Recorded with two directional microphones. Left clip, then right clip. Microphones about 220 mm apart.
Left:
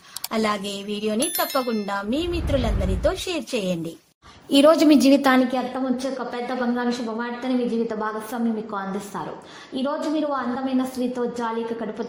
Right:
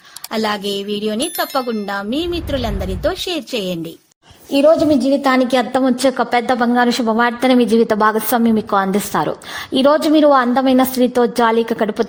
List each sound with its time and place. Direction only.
0.3 s a woman's voice: 25° right (ahead or behind)
4.5 s a woman's voice: 10° left (ahead or behind)
5.7 s a woman's voice: 50° right (ahead or behind)